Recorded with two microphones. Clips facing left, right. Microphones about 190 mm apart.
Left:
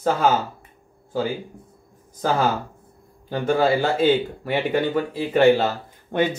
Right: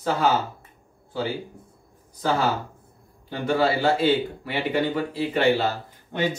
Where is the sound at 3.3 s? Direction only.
45° left (ahead or behind).